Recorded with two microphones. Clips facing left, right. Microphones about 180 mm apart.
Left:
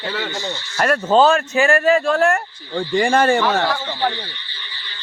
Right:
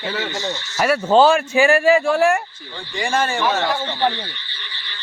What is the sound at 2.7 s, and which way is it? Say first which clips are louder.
Speech: left 6 dB; 55° left (ahead or behind).